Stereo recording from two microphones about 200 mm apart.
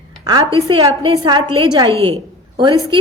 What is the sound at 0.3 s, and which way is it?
A woman's voice, 25° right (ahead or behind).